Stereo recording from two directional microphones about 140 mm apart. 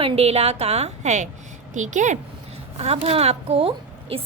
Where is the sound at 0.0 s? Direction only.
45° right (ahead or behind).